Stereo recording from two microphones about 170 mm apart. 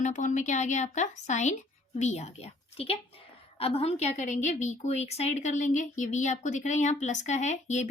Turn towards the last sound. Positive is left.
turn(degrees=45)  # may be behind; listen again after turning